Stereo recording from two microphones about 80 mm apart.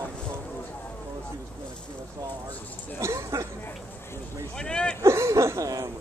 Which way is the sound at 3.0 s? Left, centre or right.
Right.